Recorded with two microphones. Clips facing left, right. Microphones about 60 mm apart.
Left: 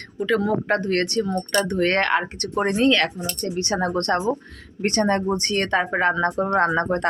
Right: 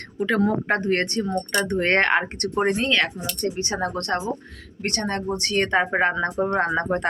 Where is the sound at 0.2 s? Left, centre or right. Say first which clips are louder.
Even; right.